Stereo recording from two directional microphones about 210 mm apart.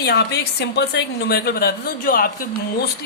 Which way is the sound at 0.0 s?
50° left (ahead or behind).